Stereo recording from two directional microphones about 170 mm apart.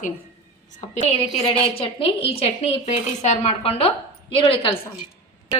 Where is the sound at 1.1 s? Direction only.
35° left (ahead or behind).